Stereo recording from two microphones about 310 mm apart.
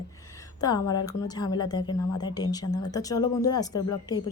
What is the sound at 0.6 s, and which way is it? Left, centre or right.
A woman's voice, centre.